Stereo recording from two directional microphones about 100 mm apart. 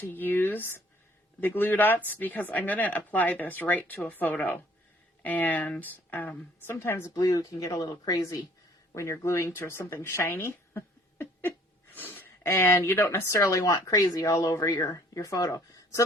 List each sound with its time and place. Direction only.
0.0 s speech: 20° left (ahead or behind)
7.1 s speech: 40° left (ahead or behind)